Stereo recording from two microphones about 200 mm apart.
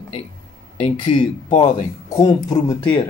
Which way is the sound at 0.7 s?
30° left (ahead or behind).